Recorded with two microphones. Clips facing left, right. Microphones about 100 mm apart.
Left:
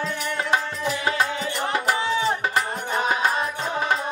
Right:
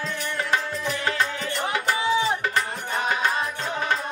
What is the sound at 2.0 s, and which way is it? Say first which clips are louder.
Music: even; 10° right (ahead or behind).